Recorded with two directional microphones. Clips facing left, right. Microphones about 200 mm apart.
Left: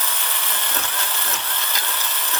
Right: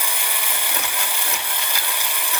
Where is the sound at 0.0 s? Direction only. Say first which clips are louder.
Right 1 dB; 10° right (ahead or behind).